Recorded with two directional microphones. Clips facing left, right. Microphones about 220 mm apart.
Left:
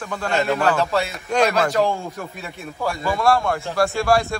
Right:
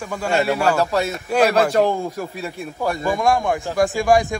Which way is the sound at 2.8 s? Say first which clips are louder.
Right 1 dB; 15° right (ahead or behind).